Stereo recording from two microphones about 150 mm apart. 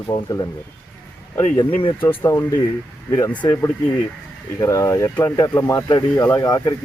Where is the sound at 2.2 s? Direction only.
20° left (ahead or behind).